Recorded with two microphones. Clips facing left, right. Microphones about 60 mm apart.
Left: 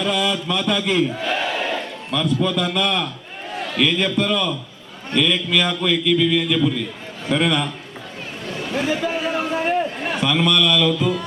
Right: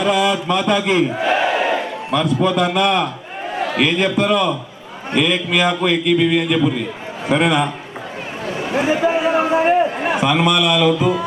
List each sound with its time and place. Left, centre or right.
0.0 s a man's voice: centre
1.1 s battle cry: right
2.1 s a man's voice: centre
3.5 s a sound: right
3.8 s a man's voice: centre
8.4 s a sound: right